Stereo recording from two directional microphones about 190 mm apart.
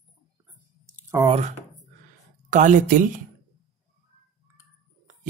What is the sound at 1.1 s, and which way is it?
Speech, 20° right (ahead or behind).